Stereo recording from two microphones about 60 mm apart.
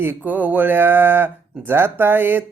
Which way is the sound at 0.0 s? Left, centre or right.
Right.